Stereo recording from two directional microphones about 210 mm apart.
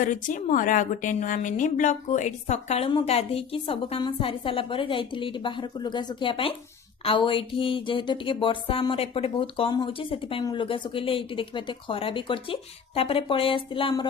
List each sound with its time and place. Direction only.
0.0 s speech: 35° left (ahead or behind)